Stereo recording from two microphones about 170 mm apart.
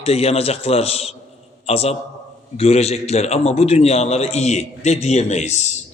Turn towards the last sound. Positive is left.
turn(degrees=40)  # may be behind; listen again after turning